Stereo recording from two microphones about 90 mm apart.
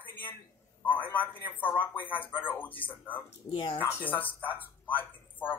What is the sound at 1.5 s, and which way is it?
Speech, 20° left (ahead or behind).